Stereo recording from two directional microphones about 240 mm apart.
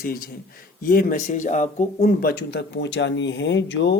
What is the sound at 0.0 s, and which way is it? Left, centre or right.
Speech, left.